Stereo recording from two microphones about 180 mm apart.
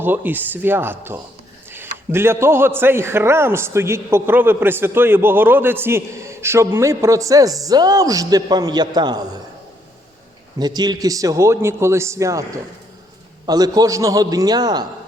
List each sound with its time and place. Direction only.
0.0 s a man's voice: 10° right (ahead or behind)
10.6 s a man's voice: 25° right (ahead or behind)